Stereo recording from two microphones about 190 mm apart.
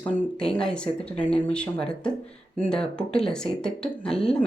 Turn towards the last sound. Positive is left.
turn(degrees=5)  # may be behind; listen again after turning